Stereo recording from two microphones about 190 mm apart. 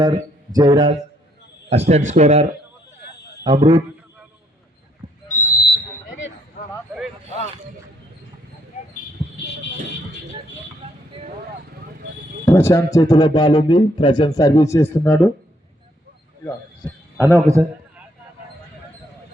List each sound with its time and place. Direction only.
0.0 s a man's voice: 20° right (ahead or behind)
1.9 s speech: 40° right (ahead or behind)
5.3 s a sound: 45° left (ahead or behind)
12.5 s a man's voice: 15° left (ahead or behind)
17.2 s a man's voice: 10° right (ahead or behind)